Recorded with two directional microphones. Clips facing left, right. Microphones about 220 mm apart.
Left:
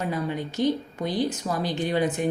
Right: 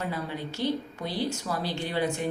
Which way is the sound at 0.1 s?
20° left (ahead or behind).